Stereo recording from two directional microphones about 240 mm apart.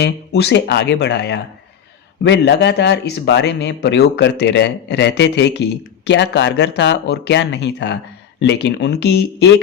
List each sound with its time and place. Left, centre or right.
0.0 s a man's voice: left